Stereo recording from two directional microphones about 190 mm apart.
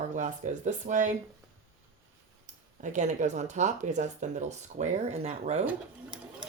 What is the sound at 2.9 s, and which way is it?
Speech, 40° right (ahead or behind).